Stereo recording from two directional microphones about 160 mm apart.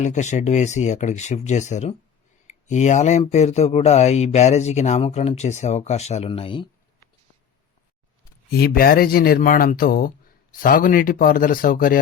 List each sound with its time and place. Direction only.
0.0 s speech: 50° left (ahead or behind)
8.4 s speech: 75° left (ahead or behind)